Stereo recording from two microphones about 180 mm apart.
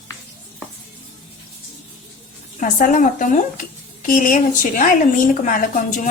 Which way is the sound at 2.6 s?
45° left (ahead or behind).